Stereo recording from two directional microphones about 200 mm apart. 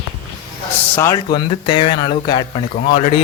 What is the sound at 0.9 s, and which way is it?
A man's voice, 15° left (ahead or behind).